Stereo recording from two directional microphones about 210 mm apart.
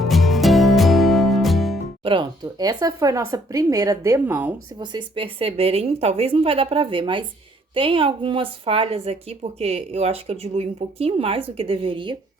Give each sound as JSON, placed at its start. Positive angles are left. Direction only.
{"t": 0.0, "sound": "music", "side_deg": 0}
{"t": 2.0, "sound": "speech", "side_deg": -20}
{"t": 4.8, "sound": "a woman's voice", "side_deg": -20}